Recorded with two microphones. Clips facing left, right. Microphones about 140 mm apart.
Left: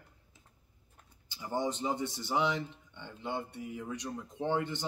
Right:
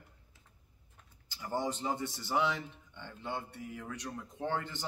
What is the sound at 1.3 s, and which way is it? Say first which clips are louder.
Speech: left 1 dB; 15° left (ahead or behind).